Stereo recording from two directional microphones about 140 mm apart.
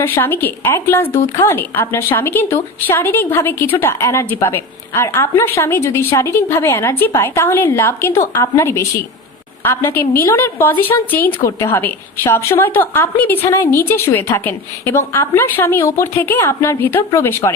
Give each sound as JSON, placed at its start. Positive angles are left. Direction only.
{"t": 0.0, "sound": "a woman's voice", "side_deg": 15}